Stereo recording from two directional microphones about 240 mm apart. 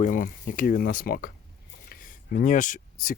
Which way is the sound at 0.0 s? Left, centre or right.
Left.